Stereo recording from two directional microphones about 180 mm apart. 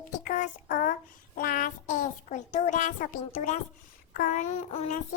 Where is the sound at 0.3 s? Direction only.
45° left (ahead or behind).